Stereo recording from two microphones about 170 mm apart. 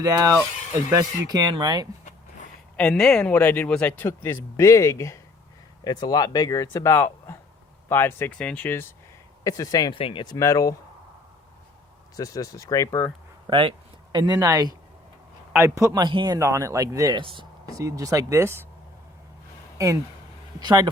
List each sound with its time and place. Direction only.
0.0 s speech: 20° right (ahead or behind)
2.7 s speech: 5° left (ahead or behind); by 10.3 s 30° left (ahead or behind)
10.3 s speech: 20° left (ahead or behind)
12.1 s speech: 20° left (ahead or behind)
13.5 s speech: 30° right (ahead or behind)
20.6 s speech: 25° right (ahead or behind)